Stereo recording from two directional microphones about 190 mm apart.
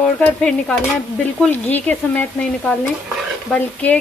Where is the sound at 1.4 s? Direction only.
10° left (ahead or behind).